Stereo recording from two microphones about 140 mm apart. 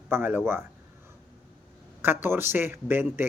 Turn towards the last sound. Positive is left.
turn(degrees=-15)  # may be behind; listen again after turning